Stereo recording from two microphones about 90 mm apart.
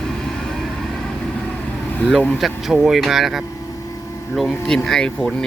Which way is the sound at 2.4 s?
5° right (ahead or behind).